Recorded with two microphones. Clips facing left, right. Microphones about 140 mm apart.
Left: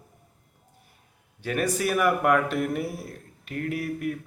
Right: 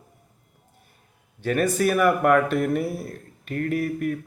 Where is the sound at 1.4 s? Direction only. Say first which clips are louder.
Right 4 dB; 10° left (ahead or behind).